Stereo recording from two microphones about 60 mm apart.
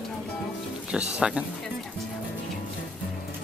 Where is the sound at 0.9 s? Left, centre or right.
Centre.